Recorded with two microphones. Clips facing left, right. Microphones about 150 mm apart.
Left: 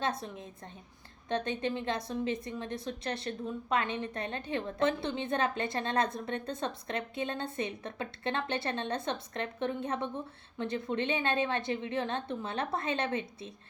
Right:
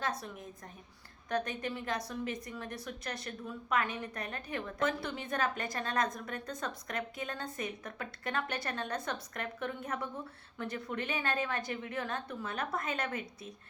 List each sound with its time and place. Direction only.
1.3 s a woman's voice: 25° left (ahead or behind)